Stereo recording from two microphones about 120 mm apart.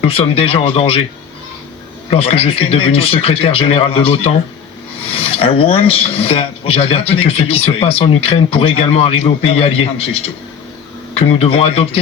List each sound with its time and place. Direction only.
0.0 s speech: 55° left (ahead or behind)
2.0 s speech: 55° left (ahead or behind)